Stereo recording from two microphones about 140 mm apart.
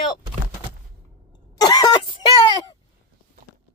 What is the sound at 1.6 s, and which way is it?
Speech, 30° left (ahead or behind).